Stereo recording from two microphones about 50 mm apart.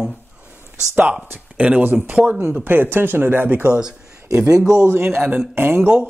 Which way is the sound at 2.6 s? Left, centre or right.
Right.